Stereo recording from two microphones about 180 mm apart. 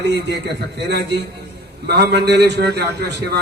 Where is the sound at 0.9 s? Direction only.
70° right (ahead or behind).